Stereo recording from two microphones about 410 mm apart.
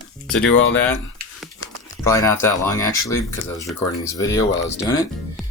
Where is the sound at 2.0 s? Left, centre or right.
Centre.